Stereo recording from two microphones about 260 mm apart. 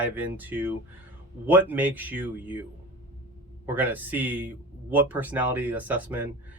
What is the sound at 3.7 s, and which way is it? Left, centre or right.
Speech, centre.